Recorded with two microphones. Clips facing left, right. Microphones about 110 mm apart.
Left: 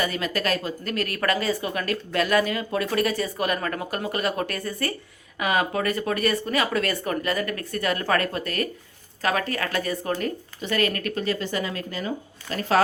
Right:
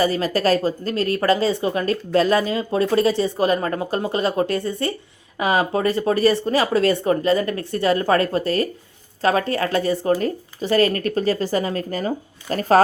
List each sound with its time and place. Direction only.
0.0 s a woman's voice: 35° right (ahead or behind)